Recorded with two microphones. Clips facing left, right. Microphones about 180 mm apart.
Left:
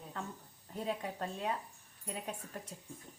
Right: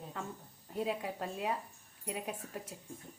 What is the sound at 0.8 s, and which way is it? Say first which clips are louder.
Speech: right 2 dB; 5° right (ahead or behind).